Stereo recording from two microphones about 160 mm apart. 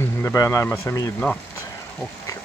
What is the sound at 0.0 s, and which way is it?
A man's voice, 15° left (ahead or behind).